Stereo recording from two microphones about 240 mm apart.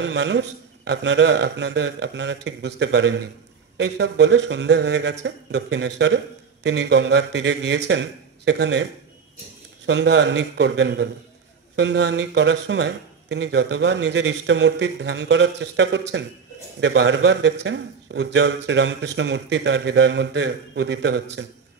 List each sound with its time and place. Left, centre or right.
0.0 s a man's voice: right
9.8 s a man's voice: right